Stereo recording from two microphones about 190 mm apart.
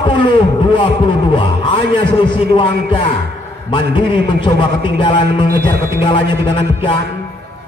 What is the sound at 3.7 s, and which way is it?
A man's voice, 25° left (ahead or behind).